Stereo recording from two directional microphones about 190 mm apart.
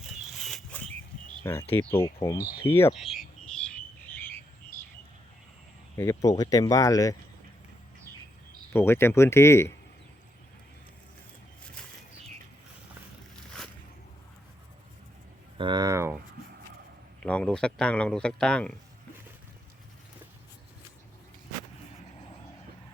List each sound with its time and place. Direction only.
0.0 s pig: centre (ahead or behind)
1.7 s speech: 10° left (ahead or behind)
2.9 s a sound: centre (ahead or behind)
4.7 s bird: 15° left (ahead or behind)
6.0 s speech: 15° left (ahead or behind)
8.7 s speech: 10° left (ahead or behind)
15.5 s speech: 25° right (ahead or behind)
17.2 s speech: 5° left (ahead or behind)